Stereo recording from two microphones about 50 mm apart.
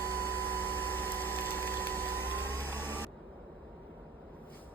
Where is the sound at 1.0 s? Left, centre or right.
Left.